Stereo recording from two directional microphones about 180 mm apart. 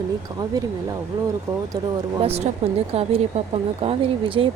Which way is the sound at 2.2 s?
35° right (ahead or behind).